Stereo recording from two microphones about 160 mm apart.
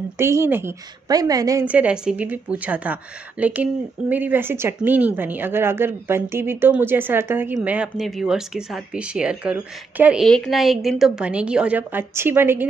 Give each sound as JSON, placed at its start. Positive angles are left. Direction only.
{"t": 0.2, "sound": "a woman's voice", "side_deg": -15}
{"t": 1.7, "sound": "a woman's voice", "side_deg": -10}
{"t": 10.2, "sound": "a woman's voice", "side_deg": 5}